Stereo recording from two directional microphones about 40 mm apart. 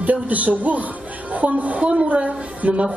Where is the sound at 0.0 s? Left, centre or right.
Right.